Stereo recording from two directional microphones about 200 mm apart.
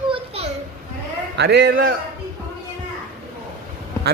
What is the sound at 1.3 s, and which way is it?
Speech, 55° right (ahead or behind).